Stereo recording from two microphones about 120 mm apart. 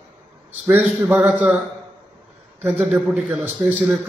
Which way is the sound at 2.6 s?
15° right (ahead or behind).